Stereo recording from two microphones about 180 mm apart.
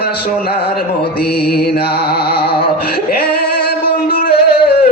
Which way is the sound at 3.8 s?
60° left (ahead or behind).